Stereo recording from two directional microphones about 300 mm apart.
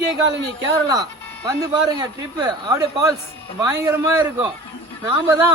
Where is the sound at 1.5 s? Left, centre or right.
Centre.